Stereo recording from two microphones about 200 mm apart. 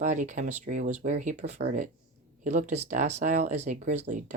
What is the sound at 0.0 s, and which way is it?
Speech, 40° right (ahead or behind).